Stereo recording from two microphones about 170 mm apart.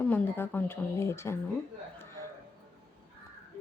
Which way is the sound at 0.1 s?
10° left (ahead or behind).